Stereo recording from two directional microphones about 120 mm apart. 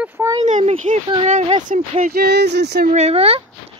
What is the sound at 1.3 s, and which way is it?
Speech, 65° right (ahead or behind).